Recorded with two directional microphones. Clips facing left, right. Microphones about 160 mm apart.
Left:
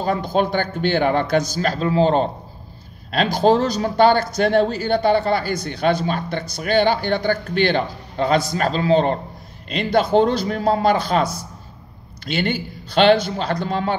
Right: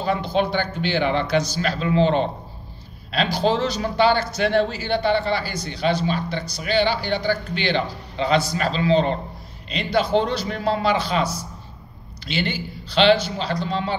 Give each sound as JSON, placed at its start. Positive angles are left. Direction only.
{"t": 0.0, "sound": "speech", "side_deg": 45}
{"t": 12.3, "sound": "speech", "side_deg": 50}